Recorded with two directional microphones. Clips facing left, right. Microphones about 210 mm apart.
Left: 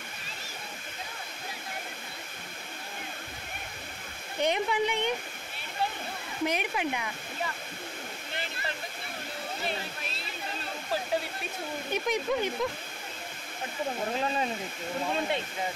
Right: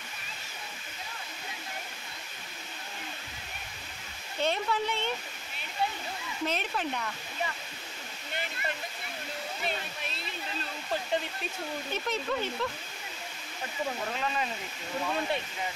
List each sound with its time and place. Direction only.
4.4 s speech: 15° left (ahead or behind)
6.4 s speech: 15° left (ahead or behind)
11.9 s speech: 15° left (ahead or behind)
15.0 s speech: 20° left (ahead or behind)